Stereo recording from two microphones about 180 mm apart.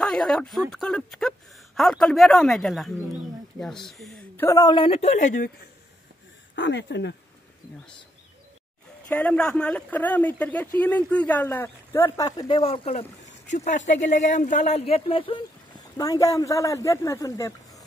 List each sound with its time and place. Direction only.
0.0 s speech: 5° left (ahead or behind)
4.5 s speech: 20° left (ahead or behind); by 5.5 s 45° left (ahead or behind)
6.5 s speech: 80° left
9.1 s speech: 5° left (ahead or behind); by 15.4 s 30° left (ahead or behind)
16.0 s speech: 20° left (ahead or behind)